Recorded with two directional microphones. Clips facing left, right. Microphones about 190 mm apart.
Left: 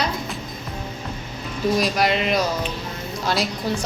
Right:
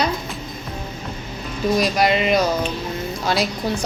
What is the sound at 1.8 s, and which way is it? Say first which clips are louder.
A woman's voice: right 4 dB; centre (ahead or behind).